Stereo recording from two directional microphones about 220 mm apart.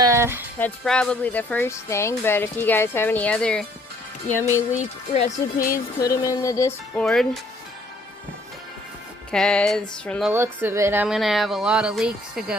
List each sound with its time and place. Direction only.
0.0 s music: 10° right (ahead or behind)
0.6 s speech: 5° left (ahead or behind)
4.8 s speech: 30° left (ahead or behind)
6.0 s speech: 15° left (ahead or behind)
6.9 s speech: centre (ahead or behind)
9.3 s speech: 5° left (ahead or behind)
10.3 s speech: 10° right (ahead or behind)